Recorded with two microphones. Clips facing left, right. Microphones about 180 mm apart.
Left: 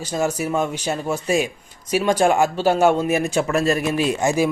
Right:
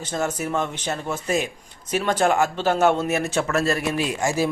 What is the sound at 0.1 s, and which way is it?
Speech, 10° left (ahead or behind).